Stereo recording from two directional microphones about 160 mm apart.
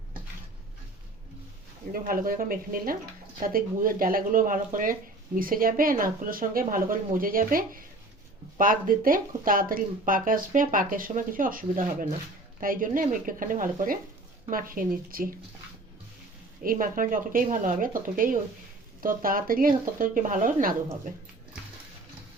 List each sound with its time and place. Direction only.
1.9 s speech: 60° right (ahead or behind)
16.6 s speech: 60° right (ahead or behind)